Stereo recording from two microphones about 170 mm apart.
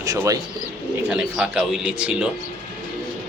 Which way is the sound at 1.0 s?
5° right (ahead or behind).